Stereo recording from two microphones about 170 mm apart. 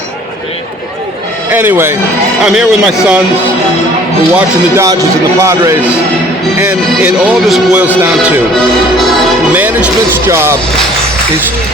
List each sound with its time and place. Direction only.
1.5 s a man's voice: 10° right (ahead or behind)
4.4 s a man's voice: 20° right (ahead or behind)
9.0 s music: 5° right (ahead or behind)